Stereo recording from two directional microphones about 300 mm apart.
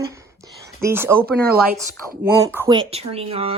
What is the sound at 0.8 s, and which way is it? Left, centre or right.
Speech, centre.